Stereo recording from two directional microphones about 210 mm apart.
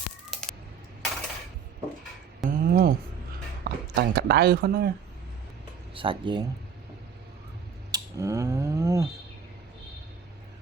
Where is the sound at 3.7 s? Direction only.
50° right (ahead or behind).